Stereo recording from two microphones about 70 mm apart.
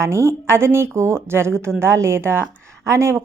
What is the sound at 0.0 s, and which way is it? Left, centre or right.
A woman's voice, right.